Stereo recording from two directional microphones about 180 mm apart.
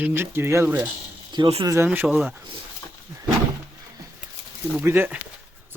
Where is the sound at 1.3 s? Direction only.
25° right (ahead or behind).